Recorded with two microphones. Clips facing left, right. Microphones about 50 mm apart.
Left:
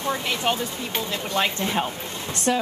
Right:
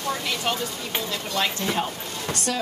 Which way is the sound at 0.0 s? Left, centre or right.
Left.